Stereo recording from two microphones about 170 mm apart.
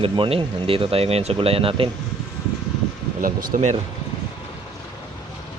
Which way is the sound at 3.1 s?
55° right (ahead or behind).